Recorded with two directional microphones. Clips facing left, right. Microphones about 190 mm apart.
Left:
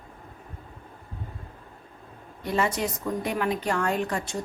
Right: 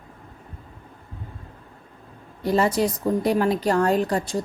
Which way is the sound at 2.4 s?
35° right (ahead or behind).